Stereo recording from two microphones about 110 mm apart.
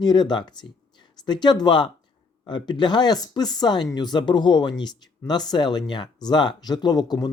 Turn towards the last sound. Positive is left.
turn(degrees=40)  # may be behind; listen again after turning